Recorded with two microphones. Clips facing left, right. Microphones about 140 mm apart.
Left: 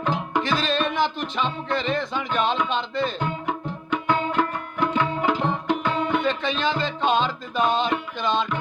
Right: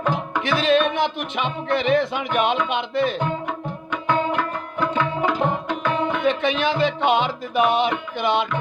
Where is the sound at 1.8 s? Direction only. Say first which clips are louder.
Right 8 dB; 65° right (ahead or behind).